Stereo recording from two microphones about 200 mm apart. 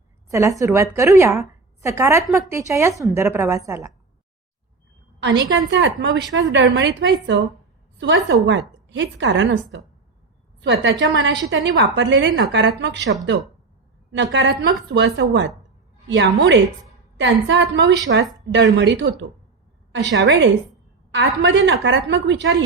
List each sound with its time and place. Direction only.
0.3 s a woman's voice: 15° right (ahead or behind)
5.5 s a woman's voice: 65° right (ahead or behind)